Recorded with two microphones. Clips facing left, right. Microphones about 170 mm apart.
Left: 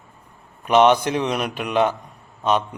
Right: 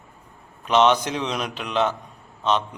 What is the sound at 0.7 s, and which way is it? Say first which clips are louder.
A man's voice: left 3 dB; 10° left (ahead or behind).